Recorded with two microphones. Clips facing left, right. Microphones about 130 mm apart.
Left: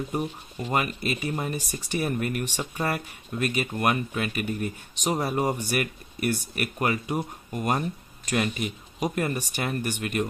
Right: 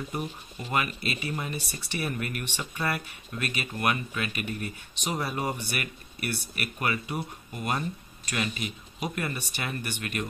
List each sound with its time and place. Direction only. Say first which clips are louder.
0.7 s speech: left 3 dB; 40° left (ahead or behind)